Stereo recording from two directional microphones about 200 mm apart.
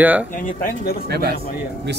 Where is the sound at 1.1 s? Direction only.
50° right (ahead or behind).